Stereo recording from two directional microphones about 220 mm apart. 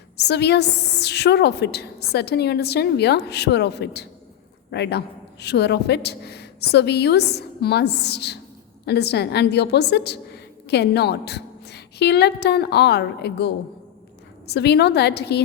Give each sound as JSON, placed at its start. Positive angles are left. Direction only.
{"t": 0.2, "sound": "a woman's voice", "side_deg": 50}